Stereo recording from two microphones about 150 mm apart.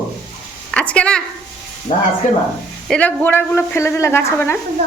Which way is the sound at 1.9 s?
40° left (ahead or behind).